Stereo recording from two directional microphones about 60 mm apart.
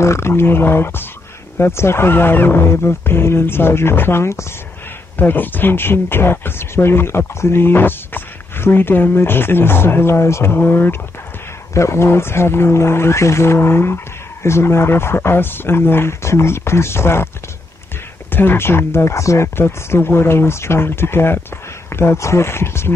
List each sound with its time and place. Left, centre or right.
0.0 s speech: left
5.1 s speech: left
11.7 s speech: left
18.3 s speech: left